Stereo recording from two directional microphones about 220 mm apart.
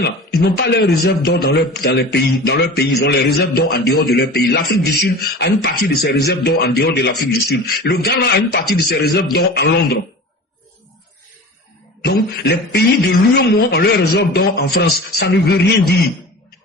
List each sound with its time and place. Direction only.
0.0 s speech: 50° left (ahead or behind)
12.0 s speech: 45° left (ahead or behind)